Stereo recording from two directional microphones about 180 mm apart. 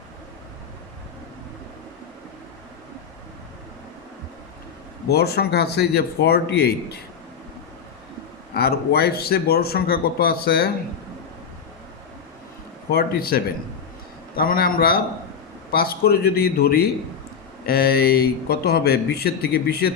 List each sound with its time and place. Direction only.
5.0 s speech: 60° left (ahead or behind)
8.5 s speech: 60° left (ahead or behind)
12.9 s speech: 55° left (ahead or behind)